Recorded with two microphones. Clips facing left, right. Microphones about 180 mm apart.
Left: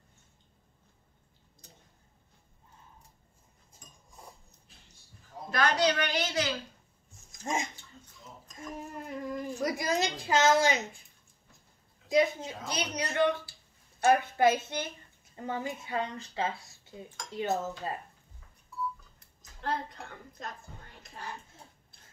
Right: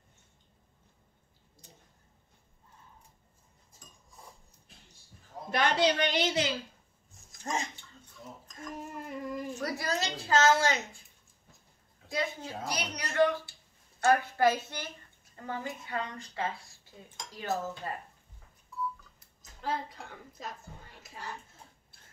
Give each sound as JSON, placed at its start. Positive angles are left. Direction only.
{"t": 5.5, "sound": "a woman's voice", "side_deg": -20}
{"t": 7.5, "sound": "a woman's voice", "side_deg": 15}
{"t": 8.6, "sound": "female singing", "side_deg": 0}
{"t": 9.6, "sound": "a woman's voice", "side_deg": 15}
{"t": 12.1, "sound": "a woman's voice", "side_deg": 20}
{"t": 19.1, "sound": "a woman's voice", "side_deg": -5}